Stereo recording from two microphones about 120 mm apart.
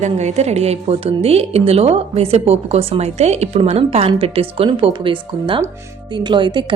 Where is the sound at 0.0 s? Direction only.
70° right (ahead or behind).